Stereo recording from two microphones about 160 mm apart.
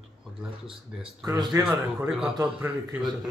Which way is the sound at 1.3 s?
20° right (ahead or behind).